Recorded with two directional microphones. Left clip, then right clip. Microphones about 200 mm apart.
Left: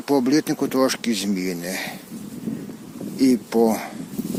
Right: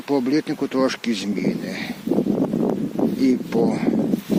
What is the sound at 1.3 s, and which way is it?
Speech, 15° left (ahead or behind).